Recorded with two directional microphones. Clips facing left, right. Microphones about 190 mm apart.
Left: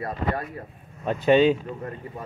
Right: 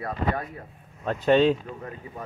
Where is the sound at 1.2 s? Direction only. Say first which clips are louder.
Left 2 dB; 5° left (ahead or behind).